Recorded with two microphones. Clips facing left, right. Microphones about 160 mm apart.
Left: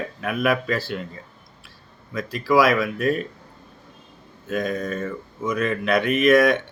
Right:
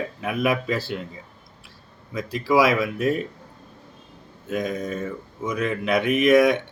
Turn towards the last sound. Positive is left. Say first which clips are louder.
# even
turn(degrees=-20)  # may be behind; listen again after turning